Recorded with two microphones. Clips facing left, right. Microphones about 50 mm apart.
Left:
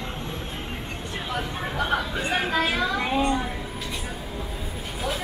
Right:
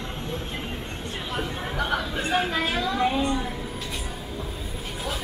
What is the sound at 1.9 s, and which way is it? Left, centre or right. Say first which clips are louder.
Chatter: right 1 dB; left.